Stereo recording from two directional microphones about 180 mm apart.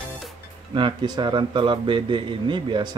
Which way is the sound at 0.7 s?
25° right (ahead or behind).